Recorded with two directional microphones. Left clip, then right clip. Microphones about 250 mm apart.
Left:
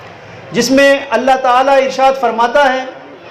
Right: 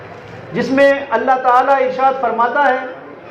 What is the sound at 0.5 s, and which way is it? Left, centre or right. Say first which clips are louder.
A man's voice: left 3 dB; left.